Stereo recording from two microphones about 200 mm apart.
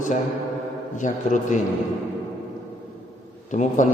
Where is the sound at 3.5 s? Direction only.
40° left (ahead or behind).